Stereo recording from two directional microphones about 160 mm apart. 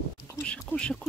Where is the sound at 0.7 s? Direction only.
5° left (ahead or behind).